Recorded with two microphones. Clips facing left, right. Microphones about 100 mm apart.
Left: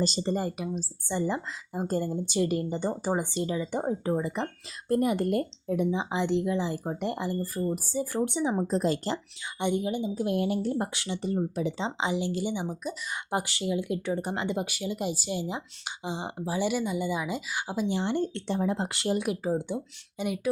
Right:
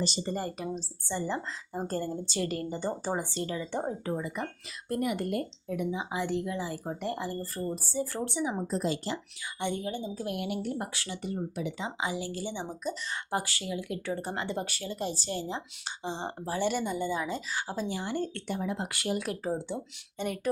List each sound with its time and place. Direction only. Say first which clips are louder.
0.0 s speech: left 4 dB; 35° left (ahead or behind)
0.3 s speech: left 3 dB; 10° left (ahead or behind)
4.0 s speech: left 5 dB; 25° left (ahead or behind)
7.3 s speech: left 4 dB; 5° left (ahead or behind)
8.6 s speech: left 4 dB; 40° left (ahead or behind)
9.6 s speech: left 5 dB; 20° left (ahead or behind)
10.3 s speech: left 6 dB; 35° left (ahead or behind)
10.9 s speech: left 5 dB; 20° left (ahead or behind)
11.2 s speech: left 5 dB; 35° left (ahead or behind); by 13.0 s 10° left (ahead or behind)
13.3 s speech: left 4 dB; 20° left (ahead or behind)
19.3 s speech: left 4 dB; 10° left (ahead or behind)